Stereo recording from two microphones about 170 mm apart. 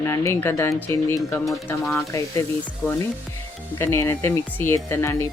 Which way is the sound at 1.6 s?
5° left (ahead or behind).